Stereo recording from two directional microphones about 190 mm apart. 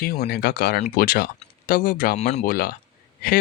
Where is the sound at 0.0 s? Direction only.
55° left (ahead or behind); by 2.4 s 35° left (ahead or behind).